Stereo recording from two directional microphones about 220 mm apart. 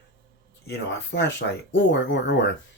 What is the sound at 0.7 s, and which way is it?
Speech, 50° left (ahead or behind).